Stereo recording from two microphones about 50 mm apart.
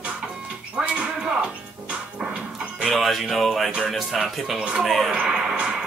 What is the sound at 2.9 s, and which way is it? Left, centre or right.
Speech, centre.